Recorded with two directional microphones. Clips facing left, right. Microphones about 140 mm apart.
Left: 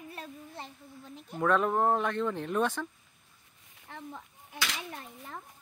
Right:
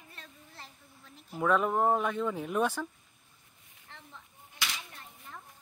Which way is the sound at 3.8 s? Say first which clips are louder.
Left 9 dB; 45° left (ahead or behind).